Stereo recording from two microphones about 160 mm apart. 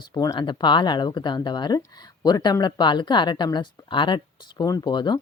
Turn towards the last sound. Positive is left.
turn(degrees=25)  # may be behind; listen again after turning